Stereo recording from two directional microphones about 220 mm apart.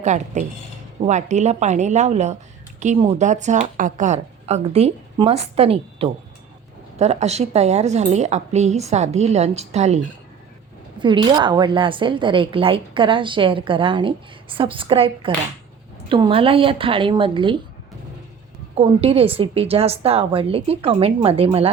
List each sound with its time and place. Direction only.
0.0 s a woman's voice: 30° right (ahead or behind)
11.0 s a woman's voice: 20° right (ahead or behind)
18.8 s a woman's voice: 25° right (ahead or behind)